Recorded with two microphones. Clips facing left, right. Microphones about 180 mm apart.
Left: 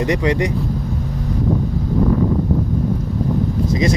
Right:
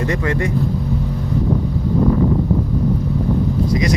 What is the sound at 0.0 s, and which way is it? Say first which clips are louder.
Speech: left 2 dB; 15° left (ahead or behind).